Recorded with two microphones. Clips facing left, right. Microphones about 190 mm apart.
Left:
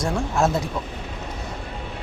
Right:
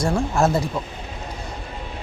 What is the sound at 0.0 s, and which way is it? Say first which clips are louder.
Speech: right 2 dB; centre (ahead or behind).